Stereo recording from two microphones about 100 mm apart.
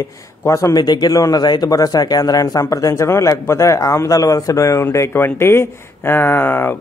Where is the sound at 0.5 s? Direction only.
30° left (ahead or behind).